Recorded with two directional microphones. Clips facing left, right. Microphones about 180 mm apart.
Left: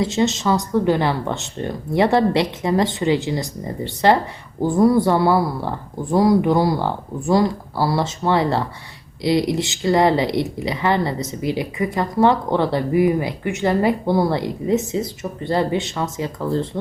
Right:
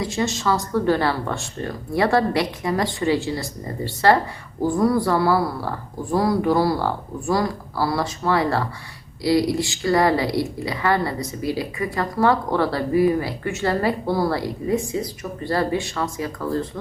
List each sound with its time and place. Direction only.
0.0 s speech: 25° left (ahead or behind)